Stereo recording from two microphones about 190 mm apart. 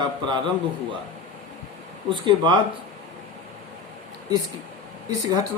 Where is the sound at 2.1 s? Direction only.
25° right (ahead or behind).